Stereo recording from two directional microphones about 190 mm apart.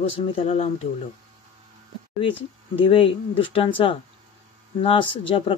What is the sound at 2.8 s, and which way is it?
Speech, 25° left (ahead or behind).